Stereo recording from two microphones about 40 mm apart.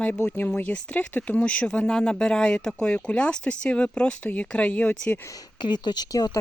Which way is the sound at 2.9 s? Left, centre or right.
Left.